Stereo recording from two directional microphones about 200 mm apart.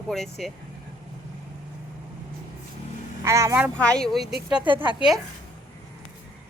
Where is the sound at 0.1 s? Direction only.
Centre (ahead or behind).